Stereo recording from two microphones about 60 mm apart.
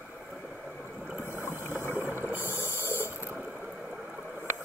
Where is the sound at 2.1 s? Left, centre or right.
Right.